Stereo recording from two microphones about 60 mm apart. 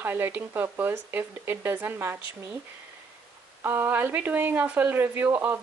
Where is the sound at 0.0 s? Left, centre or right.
Right.